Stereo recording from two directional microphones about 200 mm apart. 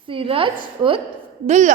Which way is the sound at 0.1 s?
25° right (ahead or behind).